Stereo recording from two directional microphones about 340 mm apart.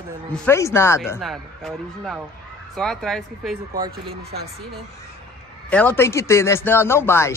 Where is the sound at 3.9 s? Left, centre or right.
Right.